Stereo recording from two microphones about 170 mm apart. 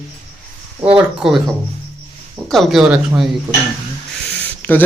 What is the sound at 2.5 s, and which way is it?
Speech, centre (ahead or behind).